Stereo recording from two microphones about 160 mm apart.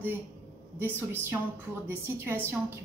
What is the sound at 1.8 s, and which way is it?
Speech, 15° right (ahead or behind).